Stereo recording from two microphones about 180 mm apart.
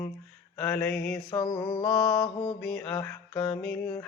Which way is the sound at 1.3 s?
20° left (ahead or behind).